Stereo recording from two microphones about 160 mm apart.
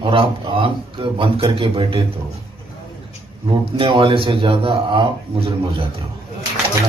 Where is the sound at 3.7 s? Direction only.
35° right (ahead or behind).